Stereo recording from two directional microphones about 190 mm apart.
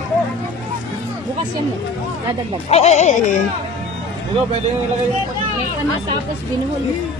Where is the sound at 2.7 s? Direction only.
35° left (ahead or behind).